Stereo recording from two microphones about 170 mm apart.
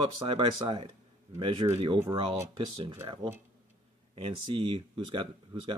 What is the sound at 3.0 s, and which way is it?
Speech, 30° right (ahead or behind).